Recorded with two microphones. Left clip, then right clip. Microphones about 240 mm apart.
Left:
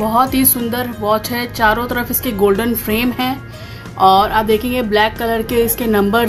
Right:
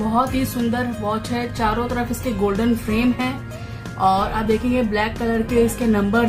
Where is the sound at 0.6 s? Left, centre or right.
Left.